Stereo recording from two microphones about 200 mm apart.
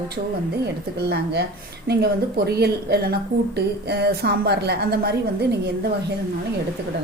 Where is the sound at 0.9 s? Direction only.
55° right (ahead or behind).